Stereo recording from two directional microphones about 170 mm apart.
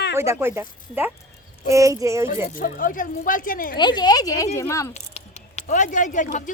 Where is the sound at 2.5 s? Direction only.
55° left (ahead or behind).